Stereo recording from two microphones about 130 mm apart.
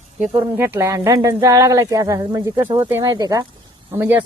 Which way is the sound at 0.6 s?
20° right (ahead or behind).